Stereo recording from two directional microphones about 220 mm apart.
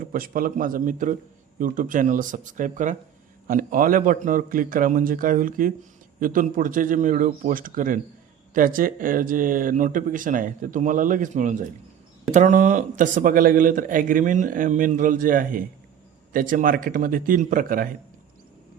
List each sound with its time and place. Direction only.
0.1 s speech: 40° right (ahead or behind)